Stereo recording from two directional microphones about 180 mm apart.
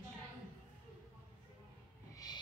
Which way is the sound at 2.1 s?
20° left (ahead or behind).